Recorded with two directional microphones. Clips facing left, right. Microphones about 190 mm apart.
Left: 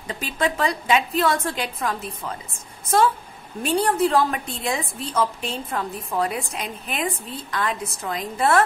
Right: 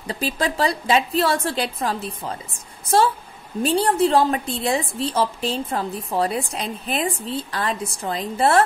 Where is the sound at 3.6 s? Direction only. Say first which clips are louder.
Right 2 dB; 30° right (ahead or behind).